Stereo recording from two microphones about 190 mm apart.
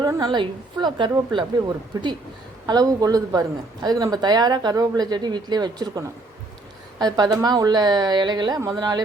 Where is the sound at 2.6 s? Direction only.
20° right (ahead or behind).